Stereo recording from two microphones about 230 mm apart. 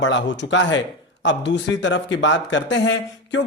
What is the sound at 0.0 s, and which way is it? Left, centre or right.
A man's voice, left.